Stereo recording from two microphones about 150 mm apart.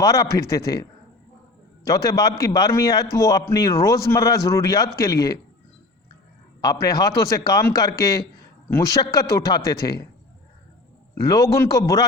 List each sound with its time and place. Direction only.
0.0 s a man's voice: 20° left (ahead or behind)
6.6 s a man's voice: 25° left (ahead or behind)
11.1 s a man's voice: 20° left (ahead or behind)